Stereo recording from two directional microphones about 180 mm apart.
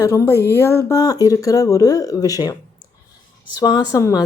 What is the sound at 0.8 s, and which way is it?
A woman's voice, 20° left (ahead or behind).